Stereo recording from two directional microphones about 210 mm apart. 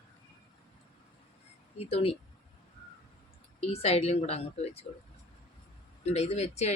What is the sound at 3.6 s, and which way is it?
Speech, 30° left (ahead or behind).